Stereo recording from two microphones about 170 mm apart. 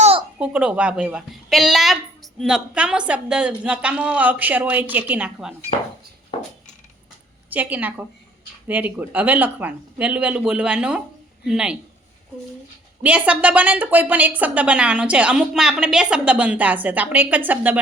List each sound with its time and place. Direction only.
0.3 s a woman's voice: 5° right (ahead or behind)
6.3 s a sound: 30° left (ahead or behind)
7.5 s a woman's voice: 10° right (ahead or behind)
13.0 s a woman's voice: 10° right (ahead or behind)